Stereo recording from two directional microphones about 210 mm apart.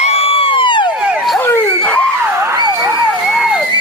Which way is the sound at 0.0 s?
30° left (ahead or behind).